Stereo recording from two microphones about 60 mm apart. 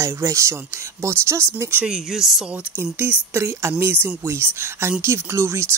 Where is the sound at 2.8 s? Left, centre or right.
Right.